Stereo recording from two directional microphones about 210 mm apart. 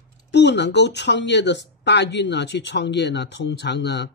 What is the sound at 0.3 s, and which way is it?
Speech, 55° left (ahead or behind).